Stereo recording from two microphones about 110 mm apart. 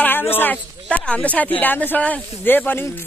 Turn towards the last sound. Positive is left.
turn(degrees=20)  # may be behind; listen again after turning